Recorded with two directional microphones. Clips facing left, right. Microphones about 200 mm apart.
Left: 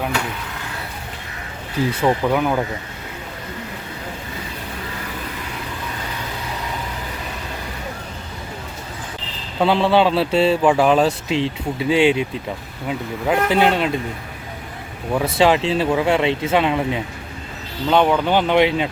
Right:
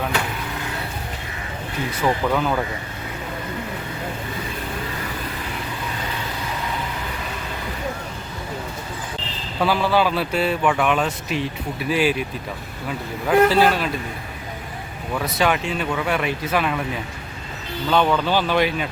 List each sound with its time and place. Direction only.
2.2 s speech: 15° left (ahead or behind)
9.6 s speech: 25° left (ahead or behind)
15.1 s speech: 30° left (ahead or behind)